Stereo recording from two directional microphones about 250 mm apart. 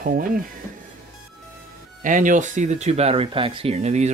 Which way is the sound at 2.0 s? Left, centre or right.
Right.